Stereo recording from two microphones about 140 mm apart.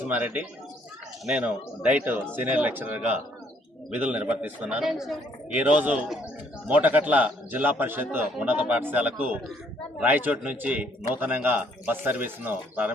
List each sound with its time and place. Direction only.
0.0 s a man's voice: 10° right (ahead or behind)